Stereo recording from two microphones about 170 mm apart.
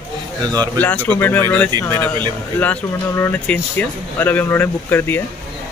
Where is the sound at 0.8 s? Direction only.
10° left (ahead or behind).